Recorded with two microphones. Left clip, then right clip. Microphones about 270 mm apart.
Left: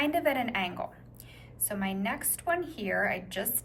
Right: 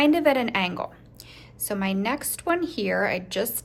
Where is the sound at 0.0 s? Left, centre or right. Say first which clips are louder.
Right 8 dB; centre.